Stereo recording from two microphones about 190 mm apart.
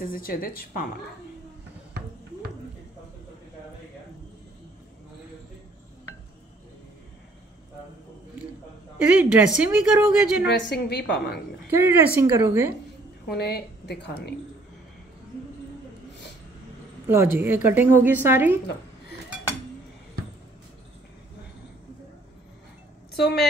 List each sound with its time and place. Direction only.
0.0 s a woman's voice: 50° left (ahead or behind)
8.9 s a woman's voice: 5° right (ahead or behind)
10.4 s a woman's voice: 65° left (ahead or behind)
11.7 s a woman's voice: 10° right (ahead or behind)
13.3 s a woman's voice: 60° left (ahead or behind)
17.1 s a woman's voice: 10° right (ahead or behind)
23.1 s speech: 60° left (ahead or behind)